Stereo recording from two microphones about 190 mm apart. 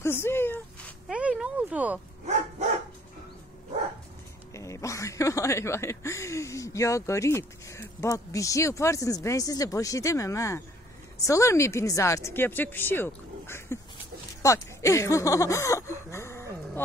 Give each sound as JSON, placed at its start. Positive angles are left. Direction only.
{"t": 0.0, "sound": "speech", "side_deg": 10}
{"t": 1.0, "sound": "speech", "side_deg": -5}
{"t": 4.6, "sound": "speech", "side_deg": 15}